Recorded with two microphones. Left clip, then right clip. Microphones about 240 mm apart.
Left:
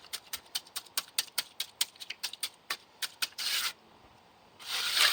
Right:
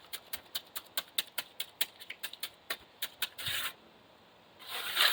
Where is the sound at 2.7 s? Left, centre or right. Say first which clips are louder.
Left 1 dB; centre.